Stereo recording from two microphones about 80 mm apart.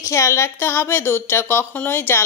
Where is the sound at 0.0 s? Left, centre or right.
Left.